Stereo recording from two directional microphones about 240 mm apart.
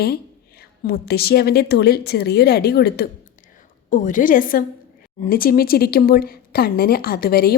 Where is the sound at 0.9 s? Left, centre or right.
Left.